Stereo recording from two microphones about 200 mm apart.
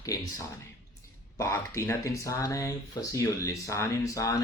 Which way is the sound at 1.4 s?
15° left (ahead or behind).